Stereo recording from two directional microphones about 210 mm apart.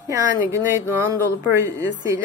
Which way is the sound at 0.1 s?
10° right (ahead or behind).